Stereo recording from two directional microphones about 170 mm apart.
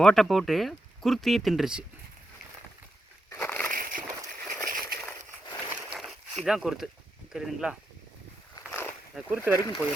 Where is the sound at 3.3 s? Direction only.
15° left (ahead or behind).